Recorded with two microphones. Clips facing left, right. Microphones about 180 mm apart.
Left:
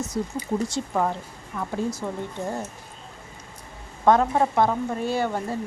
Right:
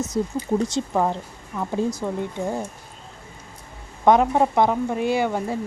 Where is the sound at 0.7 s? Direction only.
20° right (ahead or behind).